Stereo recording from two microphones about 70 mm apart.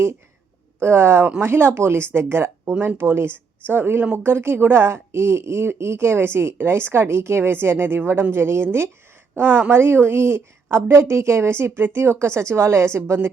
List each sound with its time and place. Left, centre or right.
0.8 s speech: right